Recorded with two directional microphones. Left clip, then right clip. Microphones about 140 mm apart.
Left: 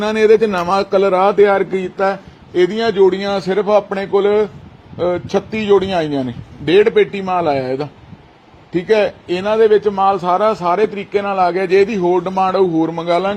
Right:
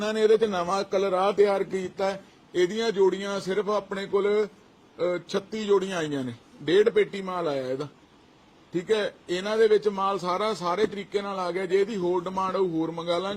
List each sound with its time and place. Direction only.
0.0 s a man's voice: 30° left (ahead or behind)
1.5 s a man's voice: 10° left (ahead or behind)
8.7 s speech: 15° left (ahead or behind)
9.4 s a man's voice: centre (ahead or behind)